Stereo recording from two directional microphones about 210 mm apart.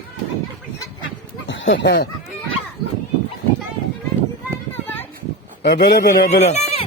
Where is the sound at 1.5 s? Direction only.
60° left (ahead or behind).